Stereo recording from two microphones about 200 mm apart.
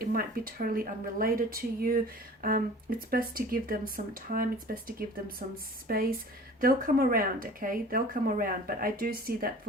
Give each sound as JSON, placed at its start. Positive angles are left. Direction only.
{"t": 0.0, "sound": "speech", "side_deg": -45}